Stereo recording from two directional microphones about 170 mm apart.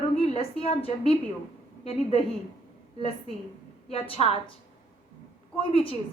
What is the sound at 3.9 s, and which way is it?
Speech, 35° left (ahead or behind).